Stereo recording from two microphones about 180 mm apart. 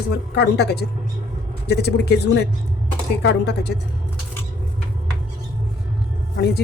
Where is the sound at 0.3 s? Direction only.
65° left (ahead or behind).